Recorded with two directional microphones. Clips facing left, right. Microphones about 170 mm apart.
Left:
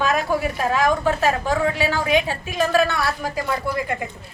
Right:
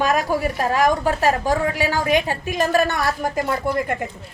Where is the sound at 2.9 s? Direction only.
45° right (ahead or behind).